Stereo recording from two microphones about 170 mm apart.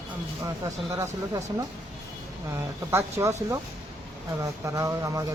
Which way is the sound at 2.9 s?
15° right (ahead or behind).